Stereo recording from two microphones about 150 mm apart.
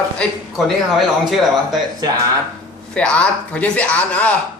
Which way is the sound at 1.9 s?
25° right (ahead or behind).